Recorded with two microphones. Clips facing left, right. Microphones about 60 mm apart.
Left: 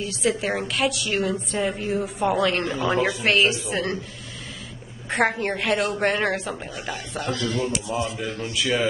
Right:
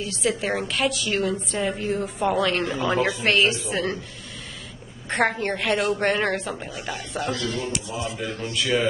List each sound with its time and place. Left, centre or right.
0.0 s a woman's voice: centre
5.1 s a woman's voice: centre